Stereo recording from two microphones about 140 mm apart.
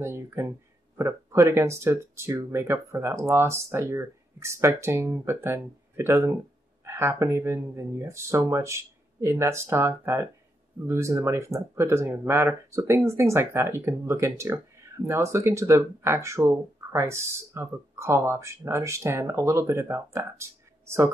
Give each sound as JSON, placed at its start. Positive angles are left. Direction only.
{"t": 0.0, "sound": "speech", "side_deg": -20}